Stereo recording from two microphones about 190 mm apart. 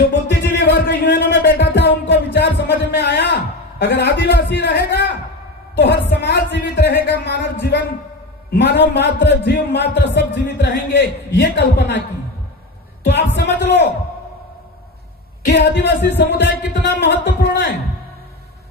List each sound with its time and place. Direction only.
0.1 s music: 65° left (ahead or behind)
3.8 s a man's voice: 60° left (ahead or behind)
13.1 s a man's voice: 65° left (ahead or behind)
15.4 s a man's voice: 60° left (ahead or behind)